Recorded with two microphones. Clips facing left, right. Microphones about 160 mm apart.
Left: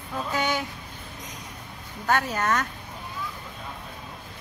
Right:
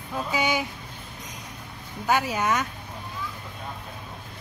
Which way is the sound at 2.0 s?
5° right (ahead or behind).